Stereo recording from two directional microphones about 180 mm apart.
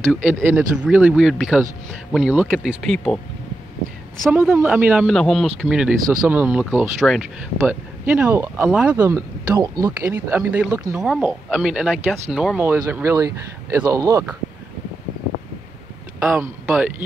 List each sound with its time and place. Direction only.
0.1 s speech: 10° right (ahead or behind)
4.3 s speech: 15° right (ahead or behind)
5.1 s speech: centre (ahead or behind); by 14.2 s 20° right (ahead or behind)
16.3 s speech: 10° right (ahead or behind)